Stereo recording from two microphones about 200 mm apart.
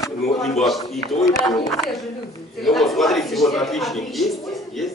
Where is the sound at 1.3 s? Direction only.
15° left (ahead or behind).